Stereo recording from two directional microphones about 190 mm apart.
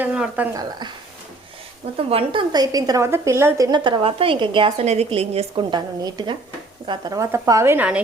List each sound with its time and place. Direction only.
0.0 s a sound: 5° right (ahead or behind)
0.5 s a woman's voice: 25° right (ahead or behind)
2.0 s a woman's voice: 30° right (ahead or behind); by 8.0 s 5° right (ahead or behind)